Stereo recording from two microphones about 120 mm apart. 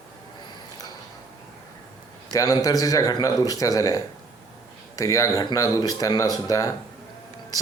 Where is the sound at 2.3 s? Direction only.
30° left (ahead or behind).